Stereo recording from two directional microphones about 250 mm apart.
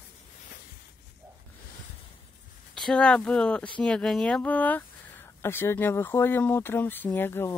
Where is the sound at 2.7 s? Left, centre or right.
Centre.